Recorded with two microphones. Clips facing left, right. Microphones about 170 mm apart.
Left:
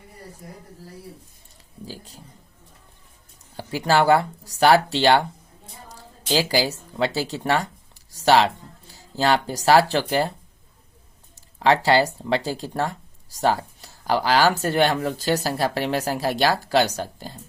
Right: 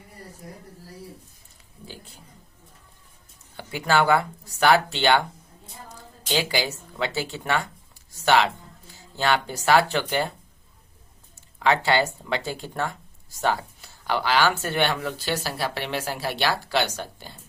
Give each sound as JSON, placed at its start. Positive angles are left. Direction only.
{"t": 1.8, "sound": "speech", "side_deg": 35}
{"t": 3.5, "sound": "speech", "side_deg": 35}
{"t": 11.6, "sound": "speech", "side_deg": 35}